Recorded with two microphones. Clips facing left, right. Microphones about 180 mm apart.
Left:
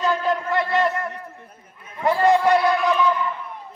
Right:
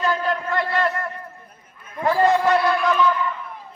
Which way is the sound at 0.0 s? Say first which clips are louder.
Left 1 dB; 20° left (ahead or behind).